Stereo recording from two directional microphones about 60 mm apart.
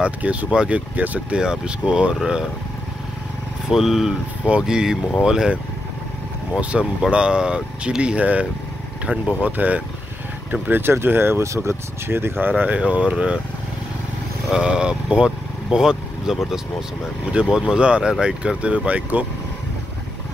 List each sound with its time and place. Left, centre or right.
0.0 s speech: right
1.4 s speech: centre
3.7 s speech: centre
4.5 s speech: centre
6.7 s speech: centre; by 11.4 s right
11.4 s speech: right
12.1 s speech: right
12.7 s speech: centre
14.5 s speech: centre